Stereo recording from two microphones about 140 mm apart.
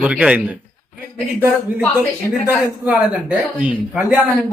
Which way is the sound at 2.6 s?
10° right (ahead or behind).